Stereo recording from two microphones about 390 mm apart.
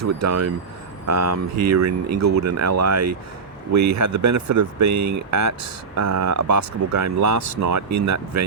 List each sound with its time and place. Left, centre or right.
0.0 s speech: right